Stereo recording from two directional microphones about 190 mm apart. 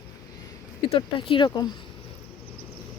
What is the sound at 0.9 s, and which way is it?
Speech, 25° left (ahead or behind).